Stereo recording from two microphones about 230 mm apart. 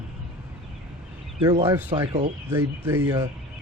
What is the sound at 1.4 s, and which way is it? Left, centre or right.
Speech, centre.